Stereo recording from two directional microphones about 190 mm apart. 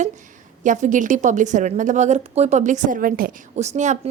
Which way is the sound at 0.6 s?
40° right (ahead or behind).